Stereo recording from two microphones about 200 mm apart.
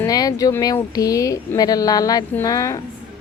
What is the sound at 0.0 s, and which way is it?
Speech, 20° left (ahead or behind).